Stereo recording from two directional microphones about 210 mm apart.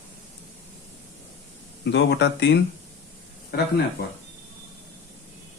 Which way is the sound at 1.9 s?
55° left (ahead or behind).